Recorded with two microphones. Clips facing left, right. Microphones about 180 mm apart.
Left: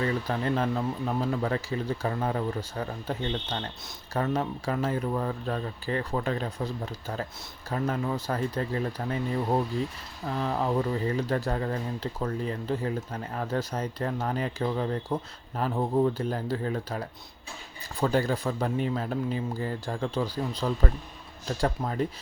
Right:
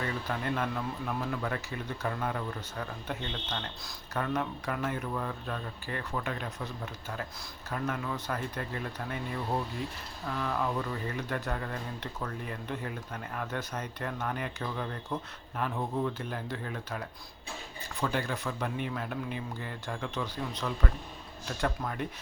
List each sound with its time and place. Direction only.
0.3 s speech: 35° left (ahead or behind)